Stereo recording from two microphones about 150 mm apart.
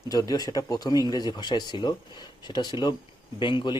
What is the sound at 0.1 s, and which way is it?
A man's voice, 25° left (ahead or behind).